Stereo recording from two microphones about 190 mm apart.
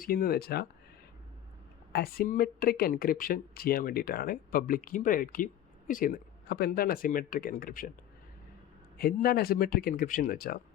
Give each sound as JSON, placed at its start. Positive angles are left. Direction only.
{"t": 0.0, "sound": "speech", "side_deg": 50}
{"t": 1.9, "sound": "speech", "side_deg": 50}
{"t": 9.0, "sound": "speech", "side_deg": 50}